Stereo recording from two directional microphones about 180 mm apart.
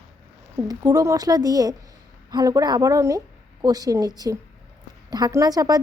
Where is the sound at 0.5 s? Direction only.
20° right (ahead or behind).